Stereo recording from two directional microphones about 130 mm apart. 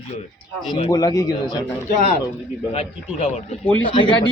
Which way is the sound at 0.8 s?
30° left (ahead or behind).